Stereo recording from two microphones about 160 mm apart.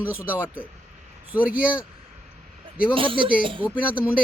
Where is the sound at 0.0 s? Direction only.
10° right (ahead or behind).